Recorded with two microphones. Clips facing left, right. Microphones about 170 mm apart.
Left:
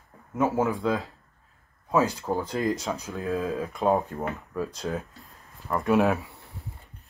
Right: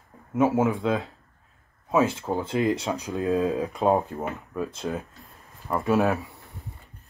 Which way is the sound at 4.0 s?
Centre (ahead or behind).